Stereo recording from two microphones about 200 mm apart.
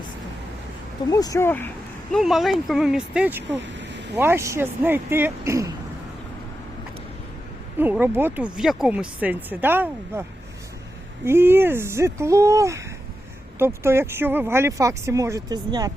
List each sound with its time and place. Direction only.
1.1 s speech: 15° left (ahead or behind)
2.1 s speech: centre (ahead or behind)
3.6 s a sound: 60° right (ahead or behind)
4.1 s speech: 10° right (ahead or behind)
7.8 s speech: 10° right (ahead or behind)
11.3 s speech: 10° right (ahead or behind)